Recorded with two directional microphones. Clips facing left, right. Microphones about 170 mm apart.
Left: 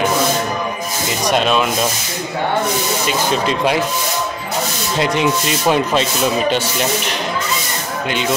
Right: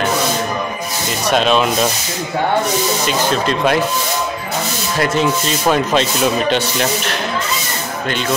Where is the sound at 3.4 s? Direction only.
10° left (ahead or behind).